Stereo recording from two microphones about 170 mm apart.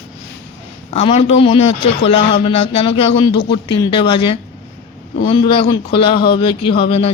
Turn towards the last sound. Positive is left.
turn(degrees=35)  # may be behind; listen again after turning